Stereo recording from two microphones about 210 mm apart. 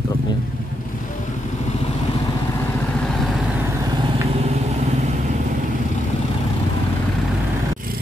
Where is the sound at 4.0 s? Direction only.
30° right (ahead or behind).